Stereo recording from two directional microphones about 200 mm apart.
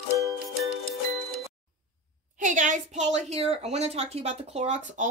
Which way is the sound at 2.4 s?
40° right (ahead or behind).